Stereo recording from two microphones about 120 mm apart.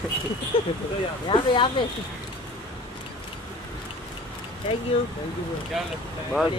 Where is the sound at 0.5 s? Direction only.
50° left (ahead or behind).